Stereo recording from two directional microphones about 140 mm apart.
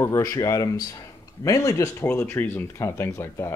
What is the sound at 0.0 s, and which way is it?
Speech, 20° left (ahead or behind).